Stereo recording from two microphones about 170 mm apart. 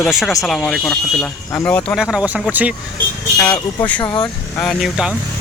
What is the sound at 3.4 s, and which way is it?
Speech, 10° left (ahead or behind).